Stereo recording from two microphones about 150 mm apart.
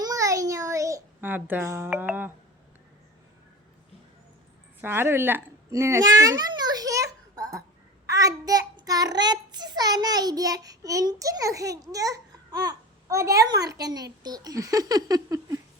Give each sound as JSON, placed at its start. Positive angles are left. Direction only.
{"t": 0.0, "sound": "a sound", "side_deg": -25}
{"t": 4.8, "sound": "a child's voice", "side_deg": -15}
{"t": 8.0, "sound": "child singing", "side_deg": -20}
{"t": 13.5, "sound": "a child's voice", "side_deg": -25}